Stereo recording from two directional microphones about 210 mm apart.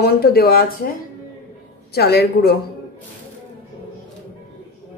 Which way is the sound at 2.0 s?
50° left (ahead or behind).